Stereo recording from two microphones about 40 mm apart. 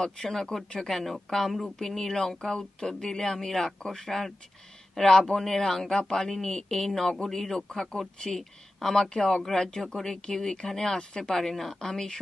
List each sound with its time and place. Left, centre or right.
0.0 s speech: centre
0.8 s speech: centre; by 11.3 s left
11.3 s speech: centre